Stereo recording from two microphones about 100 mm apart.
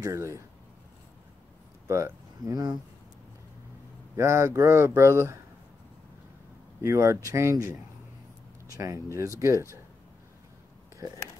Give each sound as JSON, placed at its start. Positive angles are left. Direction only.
{"t": 0.0, "sound": "speech", "side_deg": -30}
{"t": 1.9, "sound": "speech", "side_deg": -30}
{"t": 4.2, "sound": "speech", "side_deg": -30}
{"t": 6.8, "sound": "speech", "side_deg": -30}